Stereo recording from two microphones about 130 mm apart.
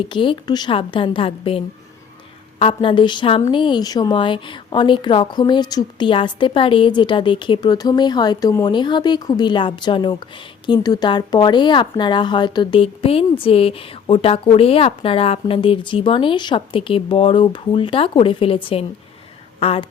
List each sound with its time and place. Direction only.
0.0 s a woman's voice: 40° left (ahead or behind)